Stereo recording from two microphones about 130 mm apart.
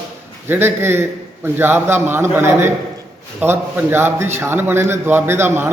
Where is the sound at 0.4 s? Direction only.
20° right (ahead or behind).